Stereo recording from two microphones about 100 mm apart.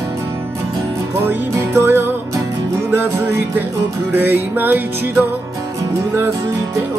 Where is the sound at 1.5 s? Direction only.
25° right (ahead or behind).